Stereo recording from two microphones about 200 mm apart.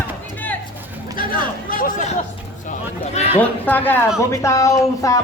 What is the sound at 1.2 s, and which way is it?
Speech, 45° left (ahead or behind).